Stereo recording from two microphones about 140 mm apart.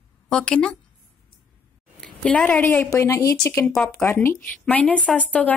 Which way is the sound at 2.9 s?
25° left (ahead or behind).